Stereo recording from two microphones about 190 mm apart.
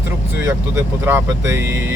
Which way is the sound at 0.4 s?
10° right (ahead or behind).